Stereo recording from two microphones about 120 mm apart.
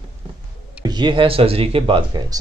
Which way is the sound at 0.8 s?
40° right (ahead or behind).